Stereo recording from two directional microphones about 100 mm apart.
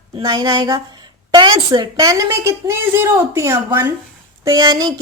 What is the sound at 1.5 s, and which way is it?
Speech, 55° right (ahead or behind).